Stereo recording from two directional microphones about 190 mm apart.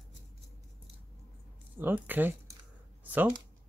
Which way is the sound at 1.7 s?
10° right (ahead or behind).